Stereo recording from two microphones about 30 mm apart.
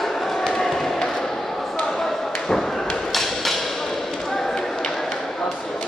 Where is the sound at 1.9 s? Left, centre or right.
Centre.